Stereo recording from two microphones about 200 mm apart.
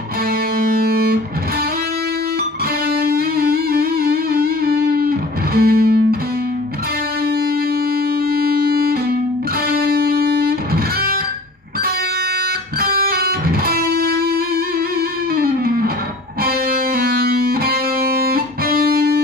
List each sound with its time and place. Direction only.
0.6 s music: 50° right (ahead or behind)
3.0 s music: 50° right (ahead or behind)
8.3 s music: 50° right (ahead or behind)
12.8 s music: 50° right (ahead or behind)
15.3 s music: 50° right (ahead or behind)